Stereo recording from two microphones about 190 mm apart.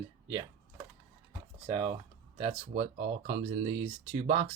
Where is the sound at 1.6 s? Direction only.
25° right (ahead or behind).